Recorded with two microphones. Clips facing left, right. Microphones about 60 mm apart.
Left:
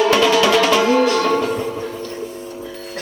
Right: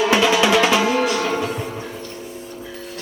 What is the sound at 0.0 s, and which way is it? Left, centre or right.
Music, centre.